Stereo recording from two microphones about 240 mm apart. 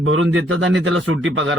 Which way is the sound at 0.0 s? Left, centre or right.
Right.